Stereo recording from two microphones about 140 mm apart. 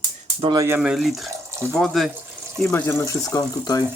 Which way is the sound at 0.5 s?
20° right (ahead or behind).